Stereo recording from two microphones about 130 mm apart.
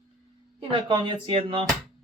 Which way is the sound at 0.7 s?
35° right (ahead or behind).